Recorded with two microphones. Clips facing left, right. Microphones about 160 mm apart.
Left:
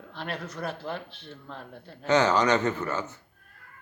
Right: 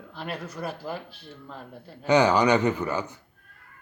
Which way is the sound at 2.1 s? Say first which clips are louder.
Right 2 dB; 15° right (ahead or behind).